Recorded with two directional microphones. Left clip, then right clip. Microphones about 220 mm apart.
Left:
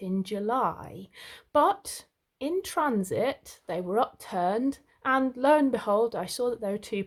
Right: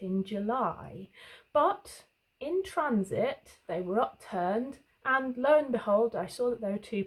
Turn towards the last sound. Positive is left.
turn(degrees=45)  # may be behind; listen again after turning